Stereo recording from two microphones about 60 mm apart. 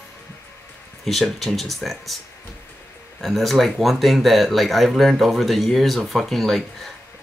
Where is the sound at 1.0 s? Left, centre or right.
Centre.